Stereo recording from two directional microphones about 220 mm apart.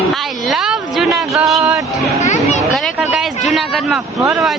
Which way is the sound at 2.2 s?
30° left (ahead or behind).